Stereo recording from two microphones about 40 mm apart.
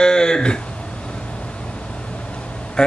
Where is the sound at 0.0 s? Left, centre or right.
Centre.